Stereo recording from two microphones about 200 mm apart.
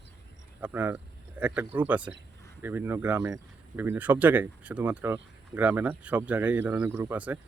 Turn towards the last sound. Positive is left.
turn(degrees=-10)  # may be behind; listen again after turning